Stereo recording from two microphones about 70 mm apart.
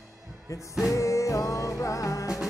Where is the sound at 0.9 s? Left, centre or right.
Left.